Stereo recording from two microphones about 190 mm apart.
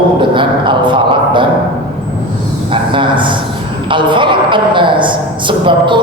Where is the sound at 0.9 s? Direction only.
25° right (ahead or behind).